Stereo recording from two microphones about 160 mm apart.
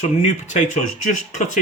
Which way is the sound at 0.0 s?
50° left (ahead or behind).